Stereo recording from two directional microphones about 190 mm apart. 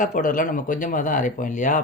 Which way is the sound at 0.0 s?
45° left (ahead or behind).